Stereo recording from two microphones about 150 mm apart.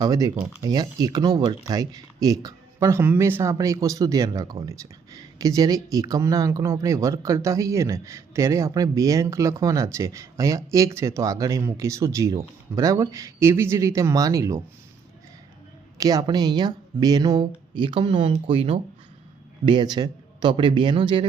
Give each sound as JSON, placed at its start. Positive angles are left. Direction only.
{"t": 0.0, "sound": "speech", "side_deg": -25}
{"t": 16.0, "sound": "a man's voice", "side_deg": -25}